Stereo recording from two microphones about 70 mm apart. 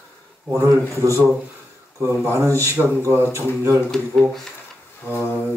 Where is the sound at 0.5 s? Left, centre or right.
Right.